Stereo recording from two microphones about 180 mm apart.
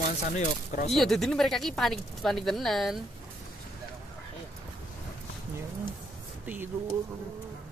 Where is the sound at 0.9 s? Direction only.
Centre (ahead or behind).